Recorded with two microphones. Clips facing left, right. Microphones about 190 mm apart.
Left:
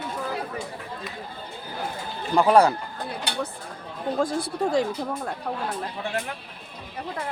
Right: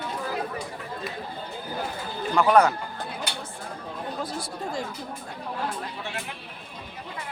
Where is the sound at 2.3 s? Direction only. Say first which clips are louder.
Left 2 dB; 30° left (ahead or behind).